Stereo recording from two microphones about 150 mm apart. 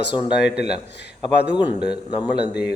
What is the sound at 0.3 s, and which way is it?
Speech, 5° right (ahead or behind).